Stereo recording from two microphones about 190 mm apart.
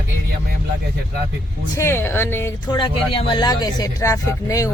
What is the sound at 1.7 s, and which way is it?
Speech, 15° left (ahead or behind).